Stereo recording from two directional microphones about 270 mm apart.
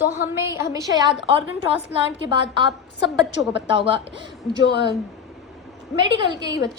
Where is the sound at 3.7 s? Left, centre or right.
Centre.